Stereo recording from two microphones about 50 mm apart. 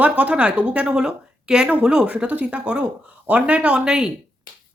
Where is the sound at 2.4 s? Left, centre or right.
Right.